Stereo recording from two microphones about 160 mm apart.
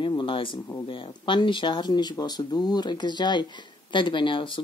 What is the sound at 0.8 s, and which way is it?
Speech, 30° left (ahead or behind).